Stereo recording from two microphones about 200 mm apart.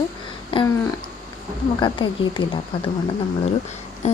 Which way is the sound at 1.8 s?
25° left (ahead or behind).